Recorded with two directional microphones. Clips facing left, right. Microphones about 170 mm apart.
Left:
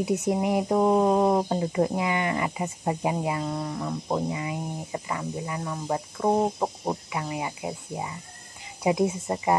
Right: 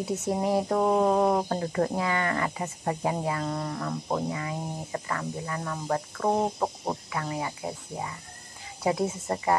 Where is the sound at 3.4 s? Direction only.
5° left (ahead or behind).